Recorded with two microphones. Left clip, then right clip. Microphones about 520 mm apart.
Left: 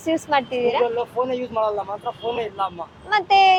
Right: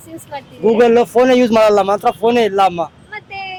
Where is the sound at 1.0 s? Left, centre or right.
Right.